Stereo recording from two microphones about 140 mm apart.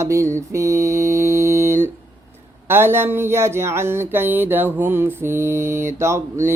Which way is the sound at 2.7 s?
15° right (ahead or behind).